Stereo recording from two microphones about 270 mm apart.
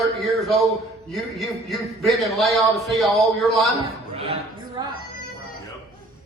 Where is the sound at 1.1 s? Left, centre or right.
Centre.